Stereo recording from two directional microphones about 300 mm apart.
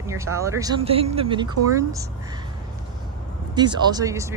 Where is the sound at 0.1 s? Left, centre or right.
Centre.